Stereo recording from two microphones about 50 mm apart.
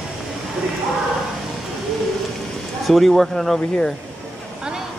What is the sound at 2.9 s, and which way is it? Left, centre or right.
Speech, centre.